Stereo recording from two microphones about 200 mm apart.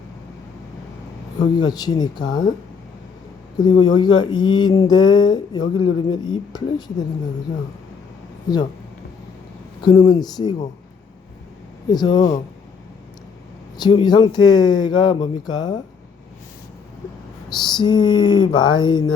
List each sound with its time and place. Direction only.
1.4 s speech: 20° left (ahead or behind)
3.6 s speech: 20° left (ahead or behind)
9.8 s speech: 20° left (ahead or behind)
11.9 s speech: 20° left (ahead or behind)
13.7 s speech: 20° left (ahead or behind)
17.6 s speech: 20° left (ahead or behind)